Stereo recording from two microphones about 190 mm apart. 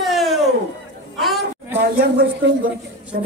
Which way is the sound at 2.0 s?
60° right (ahead or behind).